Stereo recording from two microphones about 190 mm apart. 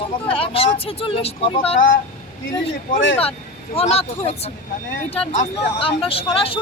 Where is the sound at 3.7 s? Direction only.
30° left (ahead or behind).